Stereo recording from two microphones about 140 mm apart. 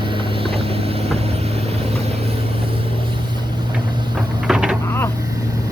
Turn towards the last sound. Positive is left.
turn(degrees=-5)  # may be behind; listen again after turning